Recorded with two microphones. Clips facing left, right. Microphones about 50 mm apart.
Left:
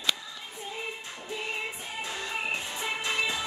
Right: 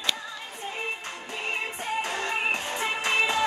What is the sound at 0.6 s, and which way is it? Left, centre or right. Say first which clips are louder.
Music: right 4 dB; right.